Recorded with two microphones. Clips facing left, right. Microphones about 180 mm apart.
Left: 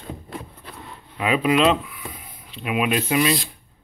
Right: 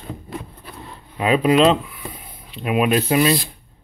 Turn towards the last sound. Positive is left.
turn(degrees=-35)  # may be behind; listen again after turning